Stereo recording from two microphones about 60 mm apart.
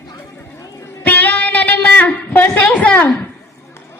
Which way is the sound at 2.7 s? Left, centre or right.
Left.